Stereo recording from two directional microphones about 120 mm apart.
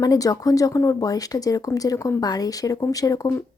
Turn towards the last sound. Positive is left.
turn(degrees=30)  # may be behind; listen again after turning